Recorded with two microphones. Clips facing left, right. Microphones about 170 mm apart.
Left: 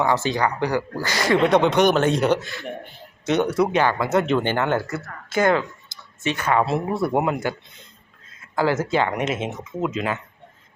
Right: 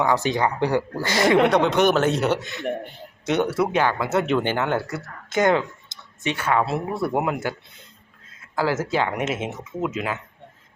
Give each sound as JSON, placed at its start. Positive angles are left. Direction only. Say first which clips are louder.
{"t": 0.1, "sound": "speech", "louder": "even", "side_deg": -20}
{"t": 1.5, "sound": "speech", "louder": "left 1 dB", "side_deg": 0}
{"t": 2.4, "sound": "speech", "louder": "right 1 dB", "side_deg": -20}
{"t": 3.5, "sound": "speech", "louder": "left 2 dB", "side_deg": -5}
{"t": 6.3, "sound": "speech", "louder": "left 2 dB", "side_deg": -10}
{"t": 8.5, "sound": "speech", "louder": "left 2 dB", "side_deg": -5}